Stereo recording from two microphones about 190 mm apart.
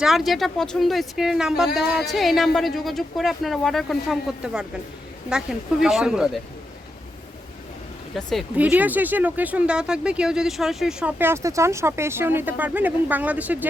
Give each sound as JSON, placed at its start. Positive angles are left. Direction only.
{"t": 0.0, "sound": "speech", "side_deg": 0}
{"t": 8.1, "sound": "speech", "side_deg": 0}